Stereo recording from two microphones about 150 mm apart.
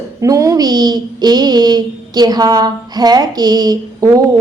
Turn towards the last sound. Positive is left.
turn(degrees=-25)  # may be behind; listen again after turning